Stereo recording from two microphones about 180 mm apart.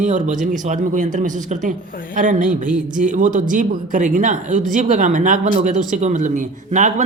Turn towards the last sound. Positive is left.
turn(degrees=-40)  # may be behind; listen again after turning